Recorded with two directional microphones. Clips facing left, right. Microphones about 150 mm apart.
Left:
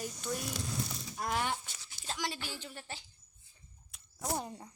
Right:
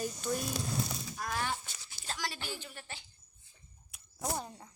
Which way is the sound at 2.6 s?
35° left (ahead or behind).